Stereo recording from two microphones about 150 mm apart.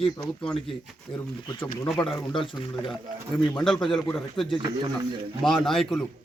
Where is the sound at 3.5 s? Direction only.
5° left (ahead or behind).